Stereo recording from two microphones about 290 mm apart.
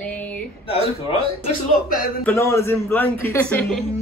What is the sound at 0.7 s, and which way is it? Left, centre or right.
Speech, centre.